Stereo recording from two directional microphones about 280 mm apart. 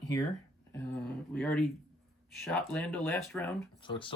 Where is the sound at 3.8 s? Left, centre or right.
Centre.